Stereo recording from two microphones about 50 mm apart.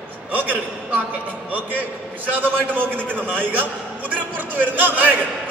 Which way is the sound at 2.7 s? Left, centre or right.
Right.